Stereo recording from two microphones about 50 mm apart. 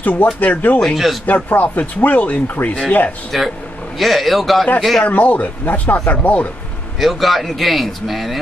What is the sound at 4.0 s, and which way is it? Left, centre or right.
Speech, centre.